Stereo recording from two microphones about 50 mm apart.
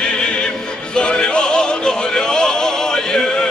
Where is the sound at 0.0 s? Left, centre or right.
Centre.